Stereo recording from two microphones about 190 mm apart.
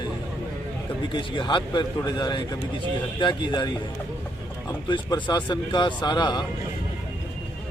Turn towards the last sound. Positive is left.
turn(degrees=25)  # may be behind; listen again after turning